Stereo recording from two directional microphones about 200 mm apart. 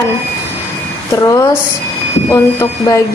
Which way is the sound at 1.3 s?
10° left (ahead or behind).